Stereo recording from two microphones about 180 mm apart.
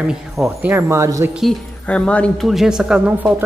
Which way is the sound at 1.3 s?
Centre (ahead or behind).